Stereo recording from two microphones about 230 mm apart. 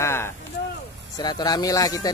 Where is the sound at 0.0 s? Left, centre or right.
Centre.